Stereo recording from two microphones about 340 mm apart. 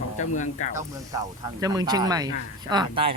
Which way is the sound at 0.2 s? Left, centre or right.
Left.